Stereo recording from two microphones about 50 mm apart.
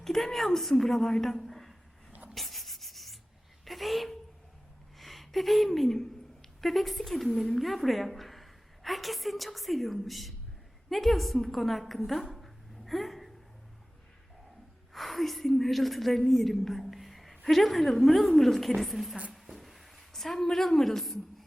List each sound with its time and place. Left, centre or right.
0.0 s a woman's voice: centre
2.3 s rub: centre
3.7 s a sound: centre
4.9 s a woman's voice: centre
14.9 s a woman's voice: centre
19.3 s a sound: centre